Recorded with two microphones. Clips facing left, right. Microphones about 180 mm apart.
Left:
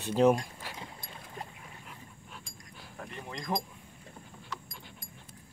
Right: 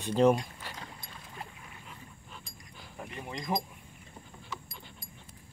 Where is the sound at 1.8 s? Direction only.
Centre (ahead or behind).